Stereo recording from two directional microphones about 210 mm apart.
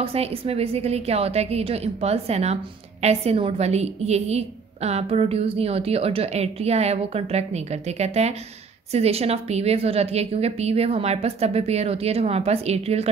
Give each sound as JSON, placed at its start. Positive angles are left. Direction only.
{"t": 0.0, "sound": "a woman's voice", "side_deg": -30}